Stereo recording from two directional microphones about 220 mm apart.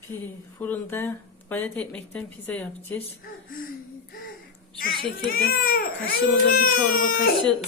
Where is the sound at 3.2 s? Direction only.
40° left (ahead or behind).